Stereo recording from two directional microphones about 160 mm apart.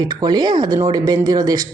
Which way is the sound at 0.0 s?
25° right (ahead or behind).